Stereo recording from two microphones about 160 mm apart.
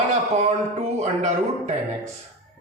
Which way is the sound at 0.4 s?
45° right (ahead or behind).